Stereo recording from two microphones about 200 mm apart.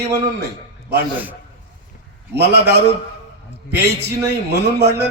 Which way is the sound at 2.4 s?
55° right (ahead or behind).